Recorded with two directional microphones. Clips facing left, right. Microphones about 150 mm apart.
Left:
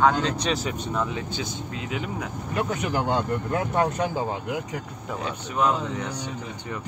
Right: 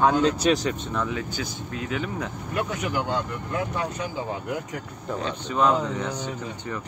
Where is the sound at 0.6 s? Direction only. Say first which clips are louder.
Even; 10° left (ahead or behind).